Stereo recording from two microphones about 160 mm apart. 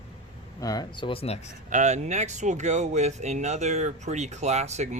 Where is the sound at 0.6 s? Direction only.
25° left (ahead or behind); by 1.5 s 40° left (ahead or behind).